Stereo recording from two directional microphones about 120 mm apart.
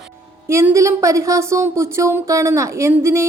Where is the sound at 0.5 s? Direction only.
25° right (ahead or behind).